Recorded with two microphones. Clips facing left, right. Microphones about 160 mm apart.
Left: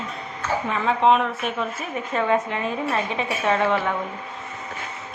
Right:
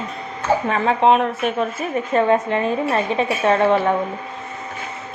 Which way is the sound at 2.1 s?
35° right (ahead or behind).